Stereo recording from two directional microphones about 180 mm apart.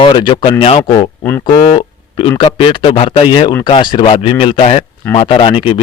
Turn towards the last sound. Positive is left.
turn(degrees=30)  # may be behind; listen again after turning